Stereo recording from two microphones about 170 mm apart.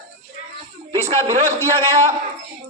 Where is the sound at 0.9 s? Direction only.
40° right (ahead or behind).